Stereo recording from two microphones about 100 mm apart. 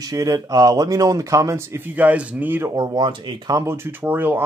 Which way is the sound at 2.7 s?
45° right (ahead or behind).